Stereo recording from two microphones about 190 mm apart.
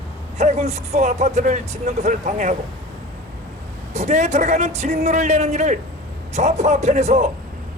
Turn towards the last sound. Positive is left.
turn(degrees=-35)  # may be behind; listen again after turning